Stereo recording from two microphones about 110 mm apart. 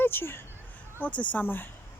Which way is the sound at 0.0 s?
20° left (ahead or behind).